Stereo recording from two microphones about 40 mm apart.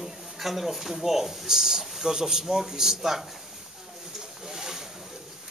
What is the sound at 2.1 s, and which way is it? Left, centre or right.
Speech, centre.